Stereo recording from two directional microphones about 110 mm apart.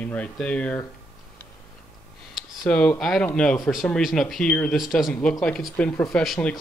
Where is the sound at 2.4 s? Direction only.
10° left (ahead or behind).